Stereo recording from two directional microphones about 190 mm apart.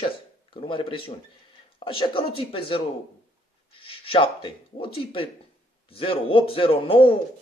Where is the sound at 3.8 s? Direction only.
30° left (ahead or behind).